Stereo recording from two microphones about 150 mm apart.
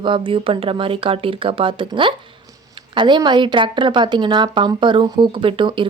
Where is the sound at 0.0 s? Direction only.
35° right (ahead or behind).